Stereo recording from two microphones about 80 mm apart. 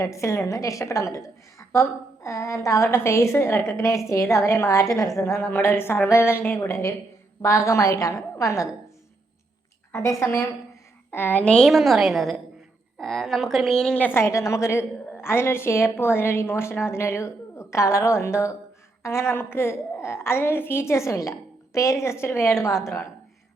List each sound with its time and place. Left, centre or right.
0.0 s a woman's voice: left
5.5 s a woman's voice: left
9.9 s a woman's voice: left
11.1 s a woman's voice: left
11.6 s a woman's voice: centre
14.0 s a woman's voice: left